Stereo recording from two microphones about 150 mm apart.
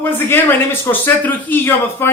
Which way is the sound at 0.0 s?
15° left (ahead or behind).